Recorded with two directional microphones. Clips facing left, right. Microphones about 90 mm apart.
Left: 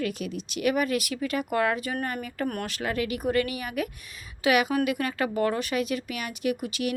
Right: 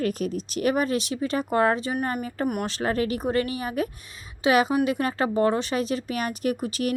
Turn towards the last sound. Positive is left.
turn(degrees=-40)  # may be behind; listen again after turning